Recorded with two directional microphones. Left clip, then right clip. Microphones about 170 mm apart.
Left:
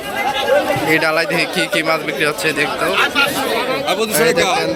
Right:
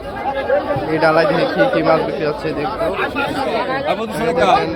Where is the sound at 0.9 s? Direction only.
10° left (ahead or behind).